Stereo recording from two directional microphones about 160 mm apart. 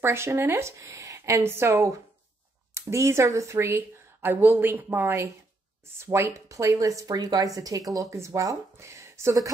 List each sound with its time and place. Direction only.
0.0 s speech: 15° right (ahead or behind)